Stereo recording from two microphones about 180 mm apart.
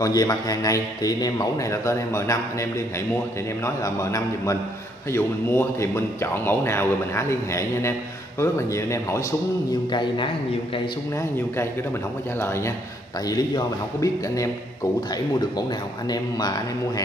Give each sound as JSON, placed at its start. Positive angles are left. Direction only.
{"t": 0.0, "sound": "a man's voice", "side_deg": 20}
{"t": 9.9, "sound": "a man's voice", "side_deg": 25}
{"t": 12.4, "sound": "a man's voice", "side_deg": 15}
{"t": 16.1, "sound": "a man's voice", "side_deg": 20}